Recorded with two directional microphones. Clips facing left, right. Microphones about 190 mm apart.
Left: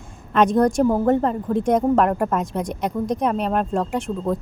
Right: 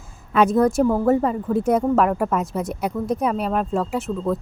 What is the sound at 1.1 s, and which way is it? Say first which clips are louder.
Speech: even; 5° right (ahead or behind).